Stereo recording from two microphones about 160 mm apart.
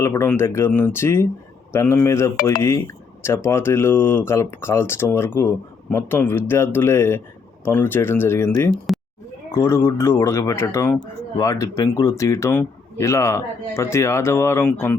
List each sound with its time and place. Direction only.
0.0 s speech: 15° left (ahead or behind)
2.3 s speech: 70° left (ahead or behind)
2.6 s speech: 20° left (ahead or behind)